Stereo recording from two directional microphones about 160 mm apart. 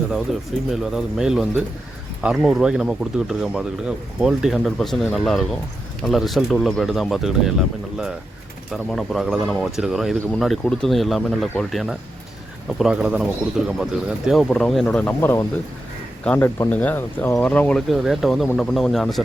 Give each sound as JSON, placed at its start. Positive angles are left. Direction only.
{"t": 0.7, "sound": "speech", "side_deg": -5}
{"t": 8.7, "sound": "speech", "side_deg": 0}